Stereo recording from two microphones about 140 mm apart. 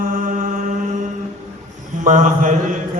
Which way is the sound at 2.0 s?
70° right (ahead or behind).